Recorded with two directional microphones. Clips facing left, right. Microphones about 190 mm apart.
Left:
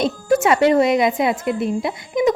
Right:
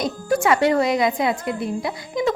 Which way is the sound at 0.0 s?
25° left (ahead or behind).